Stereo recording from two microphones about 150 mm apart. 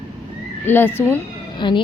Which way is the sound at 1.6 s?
30° left (ahead or behind).